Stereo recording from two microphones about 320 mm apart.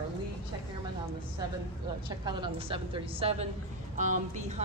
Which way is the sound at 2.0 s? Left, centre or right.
Centre.